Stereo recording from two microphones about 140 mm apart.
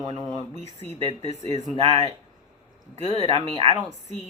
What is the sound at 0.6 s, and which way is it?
Speech, 45° right (ahead or behind).